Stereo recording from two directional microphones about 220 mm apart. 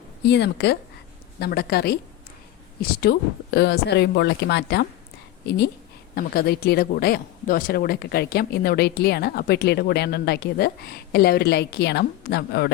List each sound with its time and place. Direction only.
0.2 s speech: 50° left (ahead or behind)
3.0 s speech: 50° left (ahead or behind)
6.1 s speech: 45° left (ahead or behind)